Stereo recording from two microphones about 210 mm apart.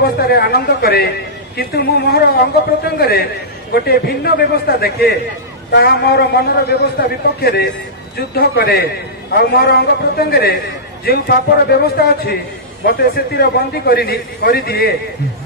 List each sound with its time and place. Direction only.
0.2 s a man's voice: 50° left (ahead or behind)